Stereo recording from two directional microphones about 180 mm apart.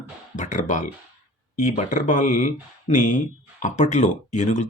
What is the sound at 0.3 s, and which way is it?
Speech, 45° left (ahead or behind).